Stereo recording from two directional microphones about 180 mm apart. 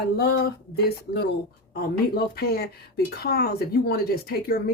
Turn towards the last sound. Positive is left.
turn(degrees=55)  # may be behind; listen again after turning